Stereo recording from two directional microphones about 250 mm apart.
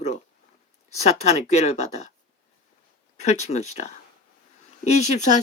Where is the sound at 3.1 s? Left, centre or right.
Left.